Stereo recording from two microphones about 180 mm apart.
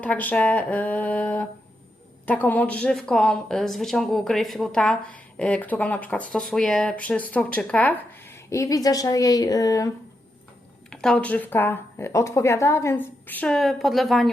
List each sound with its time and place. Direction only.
0.0 s speech: 10° left (ahead or behind)
10.8 s speech: 5° left (ahead or behind)